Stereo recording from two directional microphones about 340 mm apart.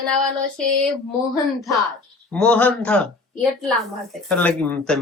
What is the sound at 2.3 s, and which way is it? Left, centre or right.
Speech, centre.